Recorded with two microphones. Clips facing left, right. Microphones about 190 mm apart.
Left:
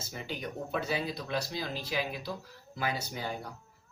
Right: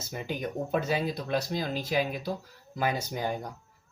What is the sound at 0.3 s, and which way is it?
Speech, 50° right (ahead or behind).